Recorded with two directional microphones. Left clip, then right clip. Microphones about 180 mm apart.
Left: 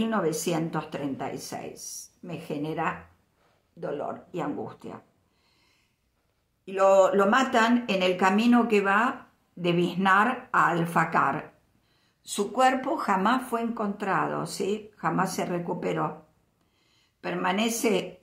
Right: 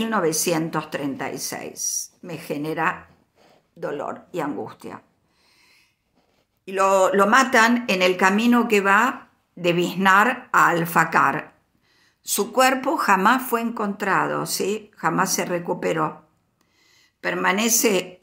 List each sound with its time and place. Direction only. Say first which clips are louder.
0.0 s speech: right 5 dB; 15° right (ahead or behind)
6.6 s a woman's voice: right 2 dB; 15° right (ahead or behind)